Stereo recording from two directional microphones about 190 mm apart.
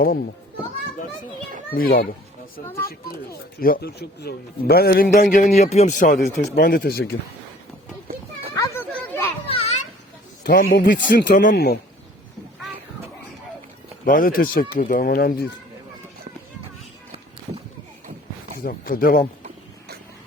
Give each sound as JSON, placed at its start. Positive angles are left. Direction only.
{"t": 1.7, "sound": "a man's voice", "side_deg": 50}
{"t": 3.6, "sound": "a man's voice", "side_deg": 55}
{"t": 8.5, "sound": "a sound", "side_deg": 15}
{"t": 9.5, "sound": "children playing", "side_deg": 30}
{"t": 10.4, "sound": "a man's voice", "side_deg": 50}
{"t": 11.5, "sound": "speech", "side_deg": 55}
{"t": 14.0, "sound": "a man's voice", "side_deg": 45}
{"t": 18.6, "sound": "a man's voice", "side_deg": 50}